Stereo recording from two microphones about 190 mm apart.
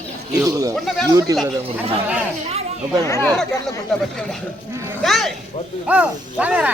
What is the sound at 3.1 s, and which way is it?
Speech, 15° left (ahead or behind).